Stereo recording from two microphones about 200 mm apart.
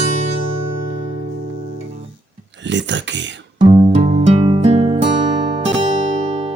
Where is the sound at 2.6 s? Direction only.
65° right (ahead or behind).